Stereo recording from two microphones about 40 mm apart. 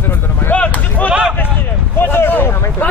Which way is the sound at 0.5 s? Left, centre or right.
Left.